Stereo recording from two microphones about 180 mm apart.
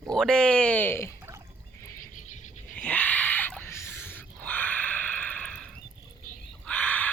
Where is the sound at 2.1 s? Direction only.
45° left (ahead or behind).